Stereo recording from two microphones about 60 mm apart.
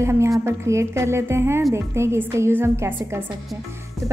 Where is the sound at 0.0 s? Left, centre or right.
Right.